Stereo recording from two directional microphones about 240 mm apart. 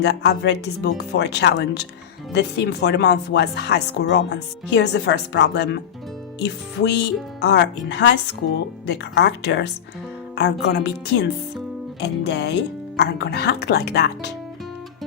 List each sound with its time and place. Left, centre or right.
0.0 s speech: left